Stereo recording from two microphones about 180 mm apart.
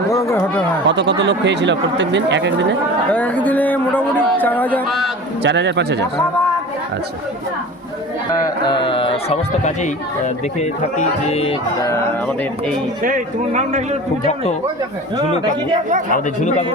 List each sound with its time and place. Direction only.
0.1 s speech: 15° left (ahead or behind)
0.9 s a man's voice: 75° right (ahead or behind)
3.1 s a man's voice: 10° left (ahead or behind)
4.9 s a man's voice: centre (ahead or behind)
5.4 s a man's voice: 75° right (ahead or behind)
8.3 s speech: 25° left (ahead or behind)
11.8 s a man's voice: 15° left (ahead or behind)
13.0 s speech: 50° right (ahead or behind)
16.1 s speech: 45° left (ahead or behind)